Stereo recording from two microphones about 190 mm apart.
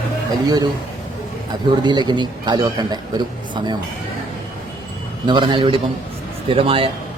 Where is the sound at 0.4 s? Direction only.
20° right (ahead or behind).